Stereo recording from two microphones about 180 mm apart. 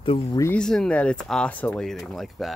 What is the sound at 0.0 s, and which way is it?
Speech, 30° left (ahead or behind).